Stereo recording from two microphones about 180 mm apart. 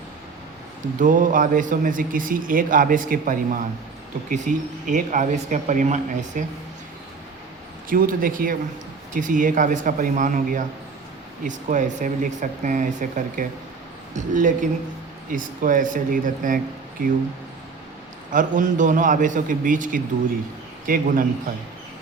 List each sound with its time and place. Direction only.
0.9 s speech: 45° right (ahead or behind)
7.9 s speech: 50° right (ahead or behind)
18.3 s speech: 45° right (ahead or behind)